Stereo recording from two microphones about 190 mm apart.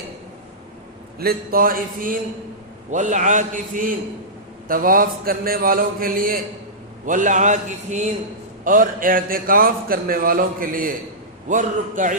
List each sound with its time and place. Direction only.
1.2 s a man's voice: 50° right (ahead or behind)